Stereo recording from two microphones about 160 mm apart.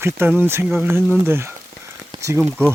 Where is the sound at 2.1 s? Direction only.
20° right (ahead or behind).